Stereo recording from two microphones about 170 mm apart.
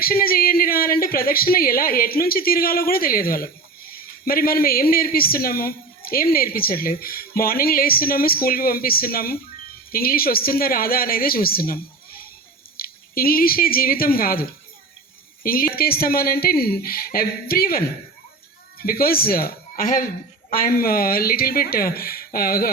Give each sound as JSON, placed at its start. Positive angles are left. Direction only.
{"t": 0.0, "sound": "speech", "side_deg": 60}